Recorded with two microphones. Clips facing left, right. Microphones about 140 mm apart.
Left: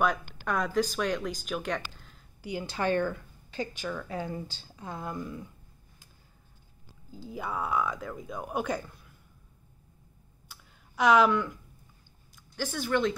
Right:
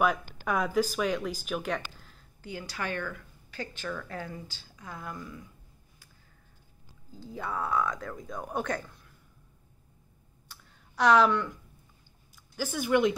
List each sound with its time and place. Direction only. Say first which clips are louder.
0.5 s speech: right 1 dB; 5° right (ahead or behind)
2.0 s a sound: even; centre (ahead or behind)
2.4 s speech: left 6 dB; 20° left (ahead or behind)
3.5 s speech: left 2 dB; 15° left (ahead or behind)
4.3 s speech: left 5 dB; 30° left (ahead or behind)
7.2 s speech: even; 10° left (ahead or behind)
10.5 s a sound: even; centre (ahead or behind)
12.5 s speech: right 3 dB; 10° right (ahead or behind)